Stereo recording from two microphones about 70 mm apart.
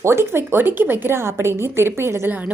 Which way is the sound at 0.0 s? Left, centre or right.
Right.